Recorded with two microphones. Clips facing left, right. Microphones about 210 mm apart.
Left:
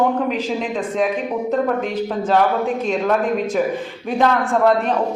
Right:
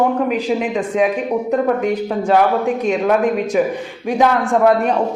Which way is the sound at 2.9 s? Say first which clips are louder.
Right 4 dB; 5° right (ahead or behind).